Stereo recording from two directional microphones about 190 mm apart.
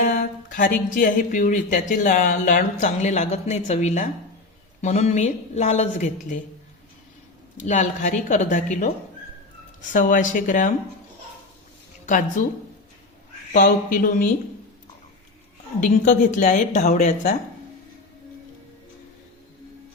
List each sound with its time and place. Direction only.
0.0 s speech: 45° left (ahead or behind)
7.5 s speech: 40° left (ahead or behind)
9.9 s speech: 45° left (ahead or behind)
12.0 s speech: 45° left (ahead or behind)
13.5 s speech: 45° left (ahead or behind)
15.8 s speech: 40° left (ahead or behind)